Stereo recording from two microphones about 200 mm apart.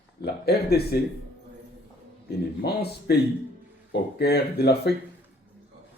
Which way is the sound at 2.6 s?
55° left (ahead or behind).